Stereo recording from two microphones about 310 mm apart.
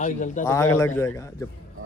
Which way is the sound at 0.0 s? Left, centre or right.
Left.